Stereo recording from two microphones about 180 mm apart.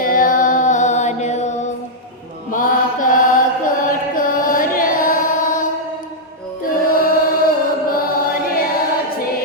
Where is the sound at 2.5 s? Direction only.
50° left (ahead or behind).